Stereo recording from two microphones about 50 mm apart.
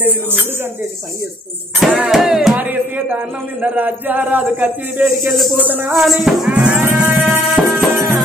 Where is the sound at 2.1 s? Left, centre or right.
Centre.